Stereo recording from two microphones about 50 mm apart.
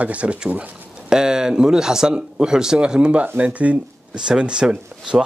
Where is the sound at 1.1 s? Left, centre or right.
Centre.